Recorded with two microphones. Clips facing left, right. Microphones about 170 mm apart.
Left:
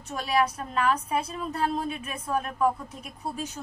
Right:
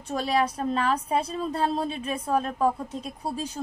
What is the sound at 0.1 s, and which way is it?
A woman's voice, 30° right (ahead or behind).